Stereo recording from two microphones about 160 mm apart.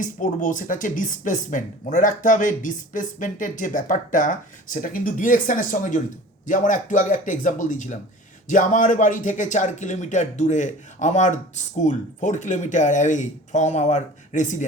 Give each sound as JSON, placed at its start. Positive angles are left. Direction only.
{"t": 0.0, "sound": "a man's voice", "side_deg": 55}